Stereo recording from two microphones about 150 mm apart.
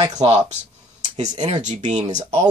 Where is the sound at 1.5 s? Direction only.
50° right (ahead or behind).